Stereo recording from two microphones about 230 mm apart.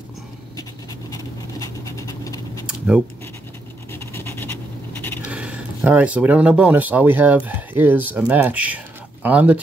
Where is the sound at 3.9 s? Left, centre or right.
Centre.